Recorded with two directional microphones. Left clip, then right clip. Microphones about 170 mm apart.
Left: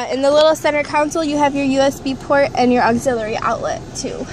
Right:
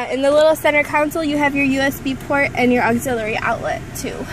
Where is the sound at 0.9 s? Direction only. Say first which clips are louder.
Left 1 dB; 5° right (ahead or behind).